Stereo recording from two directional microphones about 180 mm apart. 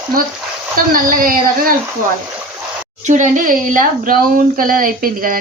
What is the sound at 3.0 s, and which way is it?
Speech, 45° right (ahead or behind).